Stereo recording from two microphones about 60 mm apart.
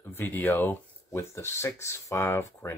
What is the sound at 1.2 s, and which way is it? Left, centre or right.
Speech, left.